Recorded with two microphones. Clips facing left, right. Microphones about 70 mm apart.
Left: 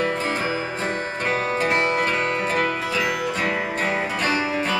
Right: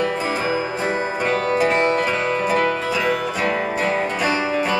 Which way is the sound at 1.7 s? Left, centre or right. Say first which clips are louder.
Right 3 dB; centre.